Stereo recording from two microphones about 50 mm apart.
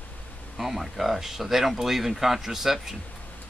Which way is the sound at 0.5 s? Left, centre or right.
Centre.